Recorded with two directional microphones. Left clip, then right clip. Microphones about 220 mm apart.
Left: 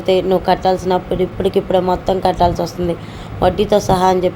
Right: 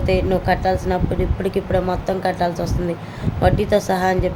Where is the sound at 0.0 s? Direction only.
15° left (ahead or behind).